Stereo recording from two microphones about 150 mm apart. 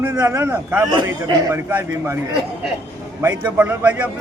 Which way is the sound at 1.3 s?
25° right (ahead or behind).